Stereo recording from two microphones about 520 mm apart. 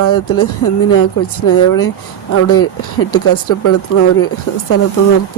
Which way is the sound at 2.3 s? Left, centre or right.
Left.